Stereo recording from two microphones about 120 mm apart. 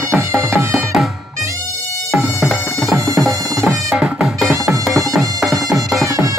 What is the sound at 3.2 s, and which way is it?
Music, centre (ahead or behind).